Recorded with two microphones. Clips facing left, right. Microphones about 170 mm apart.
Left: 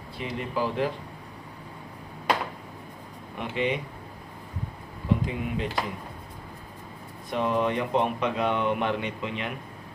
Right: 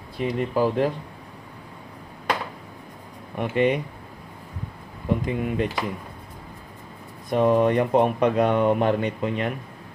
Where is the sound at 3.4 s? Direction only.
50° right (ahead or behind).